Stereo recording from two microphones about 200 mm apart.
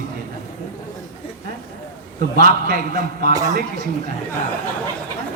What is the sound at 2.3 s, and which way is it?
A man's voice, 45° right (ahead or behind).